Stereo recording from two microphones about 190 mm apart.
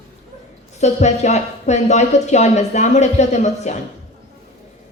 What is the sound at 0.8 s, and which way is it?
A woman's voice, 35° left (ahead or behind).